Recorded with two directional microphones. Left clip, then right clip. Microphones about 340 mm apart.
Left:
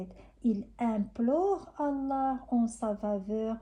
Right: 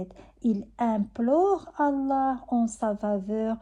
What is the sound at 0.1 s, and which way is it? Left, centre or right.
A woman's voice, right.